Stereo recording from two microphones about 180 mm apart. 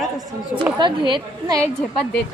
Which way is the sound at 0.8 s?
25° right (ahead or behind).